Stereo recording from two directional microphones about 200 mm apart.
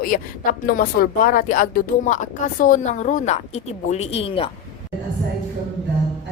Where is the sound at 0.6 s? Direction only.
45° left (ahead or behind); by 4.5 s 30° left (ahead or behind).